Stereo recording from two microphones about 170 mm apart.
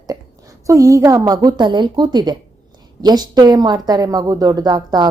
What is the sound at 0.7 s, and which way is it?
A woman's voice, 20° right (ahead or behind).